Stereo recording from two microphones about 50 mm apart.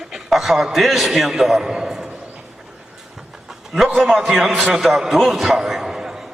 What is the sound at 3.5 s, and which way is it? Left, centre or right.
A man's voice, centre.